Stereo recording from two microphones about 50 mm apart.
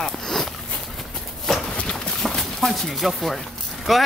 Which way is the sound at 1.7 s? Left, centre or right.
Centre.